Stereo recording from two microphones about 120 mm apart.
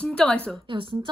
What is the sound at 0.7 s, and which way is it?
Speech, 45° right (ahead or behind).